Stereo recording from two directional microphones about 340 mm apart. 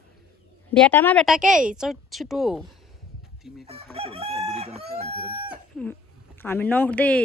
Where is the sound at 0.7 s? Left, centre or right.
Centre.